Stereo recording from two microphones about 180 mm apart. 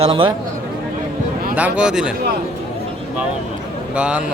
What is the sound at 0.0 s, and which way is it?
Speech, 30° right (ahead or behind).